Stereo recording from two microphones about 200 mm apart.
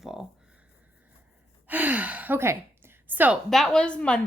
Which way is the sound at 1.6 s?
10° right (ahead or behind).